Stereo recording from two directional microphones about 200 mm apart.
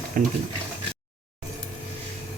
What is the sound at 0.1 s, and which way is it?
Speech, 45° right (ahead or behind).